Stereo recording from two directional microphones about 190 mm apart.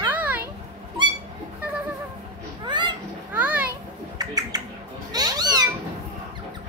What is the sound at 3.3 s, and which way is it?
Children playing, 10° right (ahead or behind).